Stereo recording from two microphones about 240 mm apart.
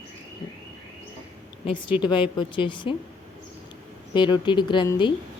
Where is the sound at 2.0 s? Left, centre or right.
Centre.